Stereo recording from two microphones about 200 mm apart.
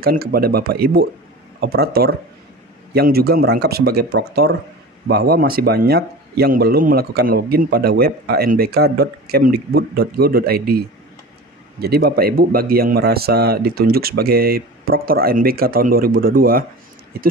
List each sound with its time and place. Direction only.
0.0 s speech: 50° right (ahead or behind)
11.8 s speech: 50° right (ahead or behind)